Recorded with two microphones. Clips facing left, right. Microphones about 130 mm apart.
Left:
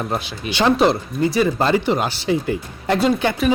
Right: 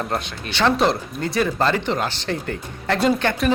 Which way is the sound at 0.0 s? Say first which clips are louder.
Left 1 dB; 5° left (ahead or behind).